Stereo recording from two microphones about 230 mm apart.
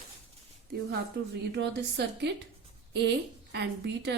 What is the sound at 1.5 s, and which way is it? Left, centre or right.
Speech, right.